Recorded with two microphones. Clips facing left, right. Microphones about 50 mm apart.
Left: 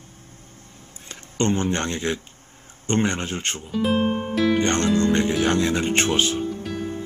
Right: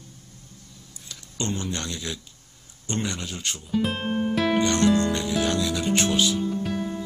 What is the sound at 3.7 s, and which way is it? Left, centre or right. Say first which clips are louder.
Speech: left 4 dB; centre.